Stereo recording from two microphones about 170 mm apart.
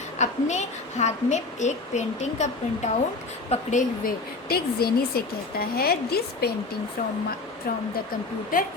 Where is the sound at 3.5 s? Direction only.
50° left (ahead or behind).